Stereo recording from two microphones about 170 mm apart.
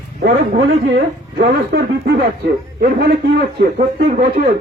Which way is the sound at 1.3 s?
65° right (ahead or behind).